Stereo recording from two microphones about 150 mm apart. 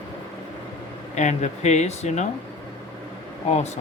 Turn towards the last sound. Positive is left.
turn(degrees=45)  # may be behind; listen again after turning